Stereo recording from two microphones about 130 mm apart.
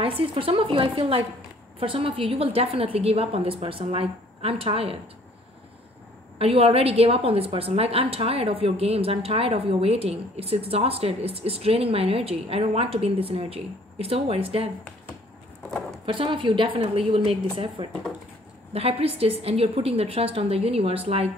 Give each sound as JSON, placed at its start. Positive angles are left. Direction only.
{"t": 0.0, "sound": "a woman's voice", "side_deg": -45}
{"t": 6.3, "sound": "a woman's voice", "side_deg": -50}
{"t": 16.1, "sound": "a woman's voice", "side_deg": -40}
{"t": 17.8, "sound": "speech", "side_deg": -35}
{"t": 18.7, "sound": "a woman's voice", "side_deg": -50}